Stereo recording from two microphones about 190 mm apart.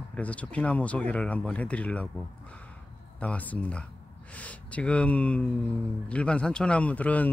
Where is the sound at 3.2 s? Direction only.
10° left (ahead or behind).